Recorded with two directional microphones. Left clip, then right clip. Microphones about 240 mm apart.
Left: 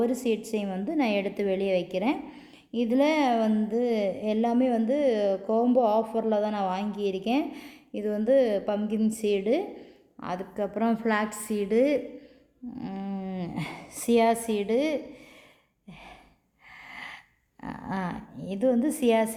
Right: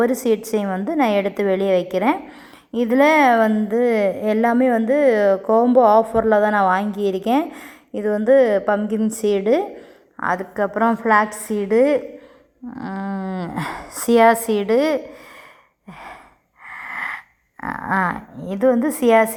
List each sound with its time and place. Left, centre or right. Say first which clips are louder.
0.0 s a woman's voice: right 9 dB; right
12.7 s a sound: right 9 dB; centre
13.8 s a sound: right 10 dB; right
14.1 s speech: right 9 dB; centre
15.9 s gasp: right 11 dB; centre
16.6 s wheeze: right 14 dB; centre
17.6 s speech: right 14 dB; centre